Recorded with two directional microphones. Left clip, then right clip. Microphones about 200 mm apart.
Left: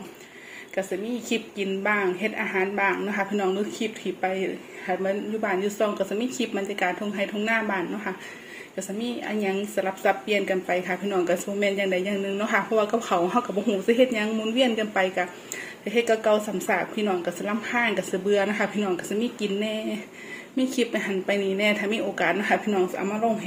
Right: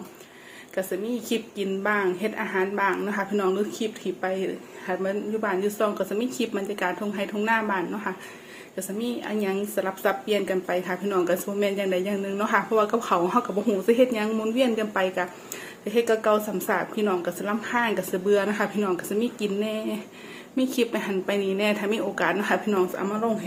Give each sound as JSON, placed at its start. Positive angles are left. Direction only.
{"t": 0.8, "sound": "a woman's voice", "side_deg": 0}